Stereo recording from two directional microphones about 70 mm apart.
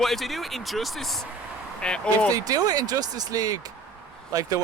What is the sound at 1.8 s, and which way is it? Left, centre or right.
Speech, centre.